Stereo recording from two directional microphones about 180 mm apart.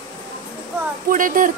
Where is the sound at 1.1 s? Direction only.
50° right (ahead or behind).